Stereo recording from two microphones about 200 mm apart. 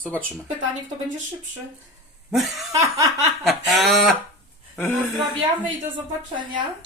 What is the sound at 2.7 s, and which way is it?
Laughter, 15° right (ahead or behind).